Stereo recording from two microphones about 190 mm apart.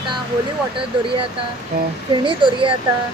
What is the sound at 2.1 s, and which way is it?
Speech, 25° right (ahead or behind).